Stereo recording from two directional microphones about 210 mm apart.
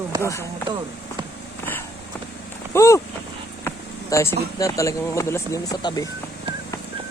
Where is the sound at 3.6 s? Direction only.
10° left (ahead or behind).